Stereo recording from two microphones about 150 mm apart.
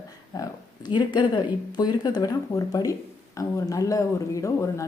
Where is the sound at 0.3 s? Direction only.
25° left (ahead or behind).